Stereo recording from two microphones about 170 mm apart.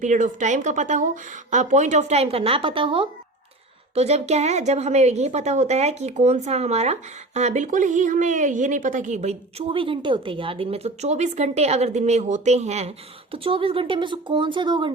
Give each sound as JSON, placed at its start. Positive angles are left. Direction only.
{"t": 0.0, "sound": "a woman's voice", "side_deg": -45}